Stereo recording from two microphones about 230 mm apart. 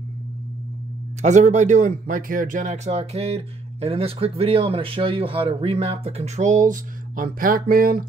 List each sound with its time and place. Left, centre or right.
1.2 s speech: right